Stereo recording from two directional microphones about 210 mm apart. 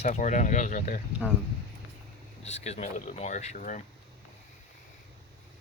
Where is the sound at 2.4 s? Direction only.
30° left (ahead or behind).